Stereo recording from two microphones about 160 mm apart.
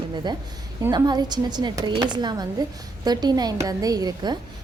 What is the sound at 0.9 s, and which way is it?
A woman's voice, 25° right (ahead or behind).